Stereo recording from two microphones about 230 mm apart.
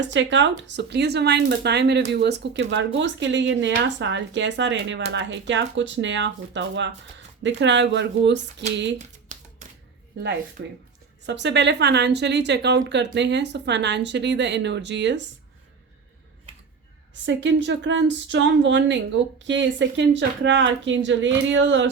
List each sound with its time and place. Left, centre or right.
0.0 s a woman's voice: right
9.0 s a sound: right
10.6 s a woman's voice: right
17.2 s a woman's voice: right